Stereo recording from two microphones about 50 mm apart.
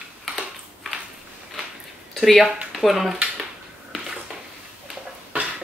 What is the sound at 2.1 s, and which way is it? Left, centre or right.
Speech, centre.